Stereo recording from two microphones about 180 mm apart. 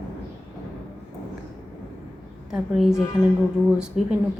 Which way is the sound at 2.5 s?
Centre (ahead or behind).